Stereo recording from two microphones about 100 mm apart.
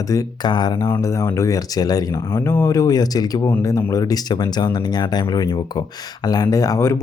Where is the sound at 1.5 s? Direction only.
40° left (ahead or behind).